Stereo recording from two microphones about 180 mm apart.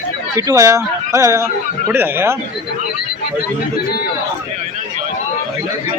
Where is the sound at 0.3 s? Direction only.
15° right (ahead or behind).